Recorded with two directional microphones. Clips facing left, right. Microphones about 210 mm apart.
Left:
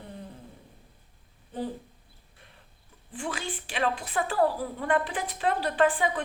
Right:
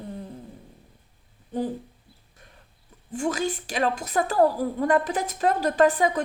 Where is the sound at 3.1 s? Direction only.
40° right (ahead or behind).